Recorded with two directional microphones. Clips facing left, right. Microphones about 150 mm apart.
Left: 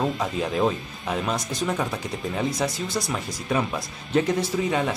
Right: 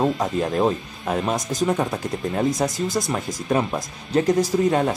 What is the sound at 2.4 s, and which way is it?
Speech, 45° right (ahead or behind).